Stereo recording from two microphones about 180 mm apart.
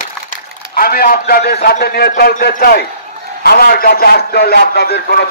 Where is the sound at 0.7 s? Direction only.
55° left (ahead or behind).